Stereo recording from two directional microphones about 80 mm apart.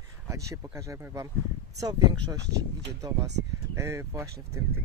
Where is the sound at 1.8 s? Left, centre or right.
Right.